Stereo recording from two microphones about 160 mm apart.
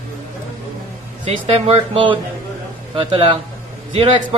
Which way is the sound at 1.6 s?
35° right (ahead or behind).